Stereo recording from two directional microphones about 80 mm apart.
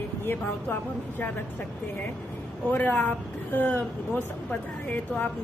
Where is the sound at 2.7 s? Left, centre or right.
Left.